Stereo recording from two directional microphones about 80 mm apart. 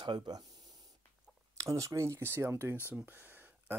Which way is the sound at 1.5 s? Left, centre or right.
Right.